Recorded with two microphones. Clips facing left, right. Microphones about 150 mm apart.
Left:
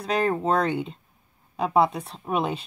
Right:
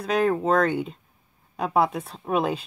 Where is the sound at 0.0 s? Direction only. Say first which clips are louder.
Right 2 dB; centre (ahead or behind).